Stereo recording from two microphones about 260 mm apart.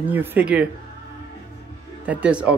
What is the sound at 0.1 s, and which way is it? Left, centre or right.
Speech, centre.